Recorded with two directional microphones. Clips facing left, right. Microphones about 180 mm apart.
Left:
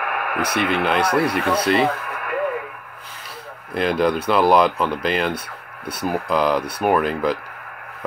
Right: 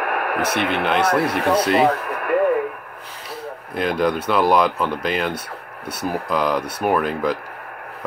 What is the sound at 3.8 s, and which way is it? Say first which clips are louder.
Speech: left 1 dB; centre (ahead or behind).